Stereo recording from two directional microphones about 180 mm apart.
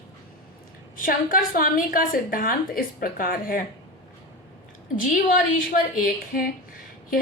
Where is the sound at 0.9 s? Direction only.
50° left (ahead or behind).